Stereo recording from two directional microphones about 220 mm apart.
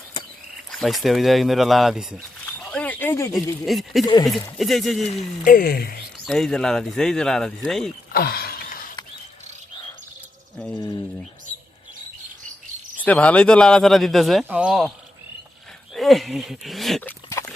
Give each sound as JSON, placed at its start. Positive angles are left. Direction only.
{"t": 0.7, "sound": "speech", "side_deg": 0}
{"t": 2.5, "sound": "a sound", "side_deg": 5}
{"t": 3.7, "sound": "speech", "side_deg": 0}
{"t": 4.0, "sound": "speech", "side_deg": 15}
{"t": 4.5, "sound": "speech", "side_deg": 0}
{"t": 5.0, "sound": "speech", "side_deg": 35}
{"t": 6.2, "sound": "speech", "side_deg": 0}
{"t": 8.1, "sound": "a sound", "side_deg": 45}
{"t": 13.1, "sound": "speech", "side_deg": 5}
{"t": 16.0, "sound": "speech", "side_deg": 0}